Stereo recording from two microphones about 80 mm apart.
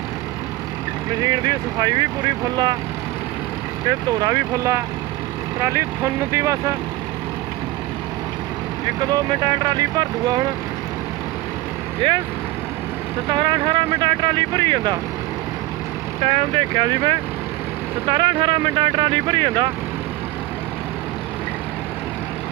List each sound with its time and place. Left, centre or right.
1.2 s speech: right
3.8 s speech: right
9.0 s speech: right
12.0 s speech: right
13.2 s speech: right
16.6 s speech: right
18.0 s speech: right